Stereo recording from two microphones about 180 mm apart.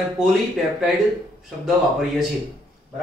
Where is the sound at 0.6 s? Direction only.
Centre (ahead or behind).